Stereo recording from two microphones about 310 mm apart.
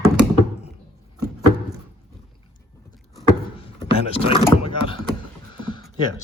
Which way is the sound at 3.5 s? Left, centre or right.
Centre.